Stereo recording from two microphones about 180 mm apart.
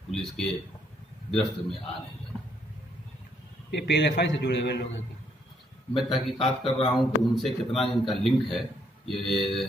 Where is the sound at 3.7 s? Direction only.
75° left (ahead or behind).